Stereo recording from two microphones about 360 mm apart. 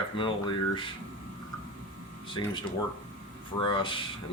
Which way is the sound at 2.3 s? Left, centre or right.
Centre.